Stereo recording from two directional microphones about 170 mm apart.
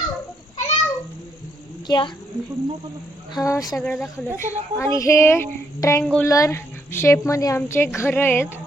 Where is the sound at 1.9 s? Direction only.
30° left (ahead or behind).